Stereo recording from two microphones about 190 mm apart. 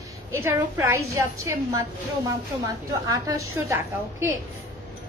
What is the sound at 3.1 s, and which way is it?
Speech, 15° right (ahead or behind).